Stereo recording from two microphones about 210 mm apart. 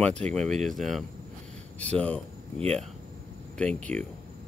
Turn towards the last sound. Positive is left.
turn(degrees=5)  # may be behind; listen again after turning